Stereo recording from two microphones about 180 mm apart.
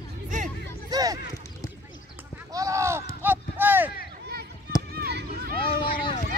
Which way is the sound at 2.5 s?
20° right (ahead or behind).